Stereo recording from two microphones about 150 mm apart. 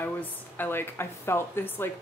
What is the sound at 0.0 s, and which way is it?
A woman's voice, 10° left (ahead or behind).